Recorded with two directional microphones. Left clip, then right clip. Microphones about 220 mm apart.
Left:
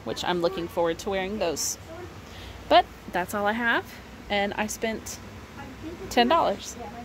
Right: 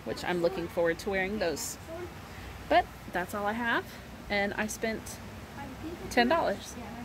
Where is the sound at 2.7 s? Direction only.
20° left (ahead or behind).